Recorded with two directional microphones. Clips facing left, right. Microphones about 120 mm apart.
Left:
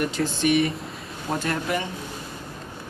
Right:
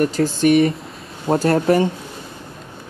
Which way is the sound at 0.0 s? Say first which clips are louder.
Right 7 dB; 40° right (ahead or behind).